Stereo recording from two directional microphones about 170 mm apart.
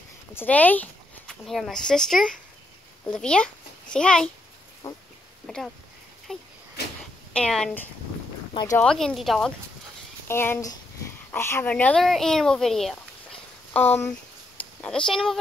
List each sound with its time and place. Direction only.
0.3 s speech: 10° left (ahead or behind)
6.3 s speech: 5° left (ahead or behind)
8.5 s speech: 20° left (ahead or behind)
8.8 s speech: centre (ahead or behind)
10.2 s speech: 15° left (ahead or behind)
13.7 s speech: 15° left (ahead or behind)